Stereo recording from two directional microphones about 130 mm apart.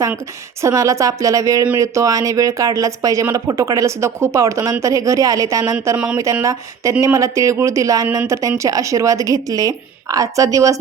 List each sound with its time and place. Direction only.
0.6 s speech: 25° right (ahead or behind)